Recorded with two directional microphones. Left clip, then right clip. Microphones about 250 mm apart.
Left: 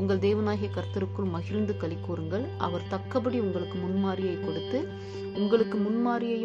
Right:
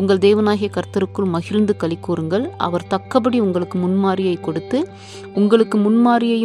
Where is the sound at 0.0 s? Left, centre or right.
Right.